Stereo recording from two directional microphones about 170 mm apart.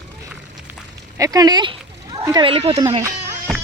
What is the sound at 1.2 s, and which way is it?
Speech, 20° right (ahead or behind).